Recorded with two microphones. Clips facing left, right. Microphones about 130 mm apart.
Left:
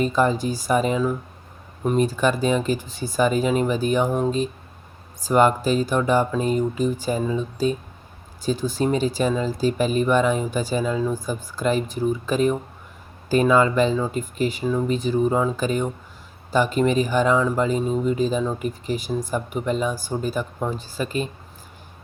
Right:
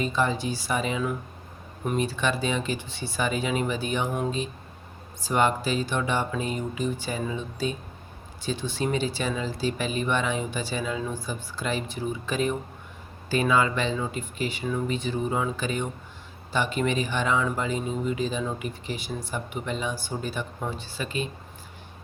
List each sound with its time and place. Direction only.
0.0 s speech: 40° left (ahead or behind)